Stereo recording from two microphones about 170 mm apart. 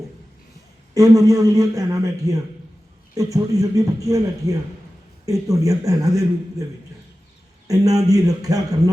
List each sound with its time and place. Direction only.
0.9 s a man's voice: 20° right (ahead or behind)
7.7 s a man's voice: 20° right (ahead or behind)